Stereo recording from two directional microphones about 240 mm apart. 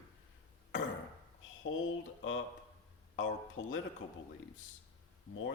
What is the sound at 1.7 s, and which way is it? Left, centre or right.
Speech, left.